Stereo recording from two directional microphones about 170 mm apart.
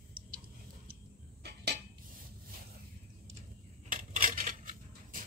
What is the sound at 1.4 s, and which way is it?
Dishes, 70° right (ahead or behind).